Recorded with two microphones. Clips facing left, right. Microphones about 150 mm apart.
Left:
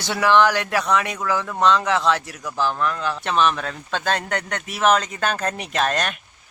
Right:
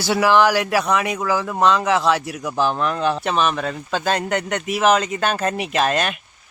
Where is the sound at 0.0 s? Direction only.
5° right (ahead or behind); by 3.2 s 20° right (ahead or behind).